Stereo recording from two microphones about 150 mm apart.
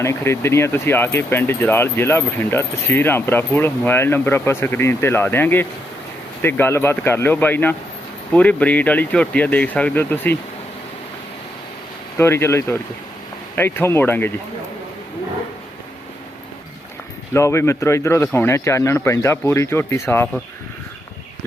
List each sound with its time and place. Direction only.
0.0 s speech: 20° left (ahead or behind)
12.1 s speech: 15° left (ahead or behind)
17.3 s a man's voice: 20° left (ahead or behind)